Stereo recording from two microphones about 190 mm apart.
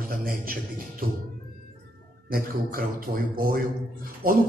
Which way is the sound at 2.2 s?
50° right (ahead or behind).